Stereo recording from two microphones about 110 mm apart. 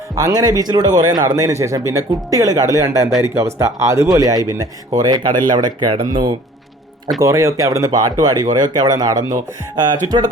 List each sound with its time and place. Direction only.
0.2 s a man's voice: 35° right (ahead or behind)
7.2 s a man's voice: 30° right (ahead or behind)